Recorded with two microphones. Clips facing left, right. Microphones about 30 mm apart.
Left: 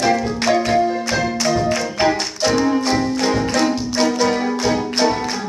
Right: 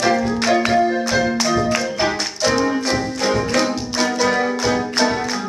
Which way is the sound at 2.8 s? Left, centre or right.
Centre.